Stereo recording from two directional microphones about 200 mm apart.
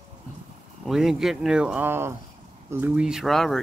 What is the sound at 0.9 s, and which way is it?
Speech, centre (ahead or behind).